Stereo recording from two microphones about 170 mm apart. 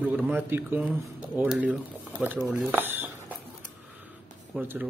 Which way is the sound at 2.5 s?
10° right (ahead or behind).